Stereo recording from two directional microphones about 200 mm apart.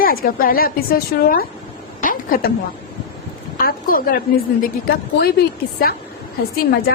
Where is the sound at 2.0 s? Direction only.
45° left (ahead or behind).